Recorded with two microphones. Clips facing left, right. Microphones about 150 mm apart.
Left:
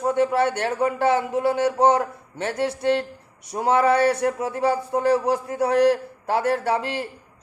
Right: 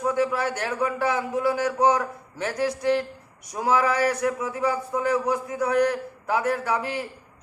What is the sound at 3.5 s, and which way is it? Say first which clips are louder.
A man's voice: left 4 dB; 30° left (ahead or behind).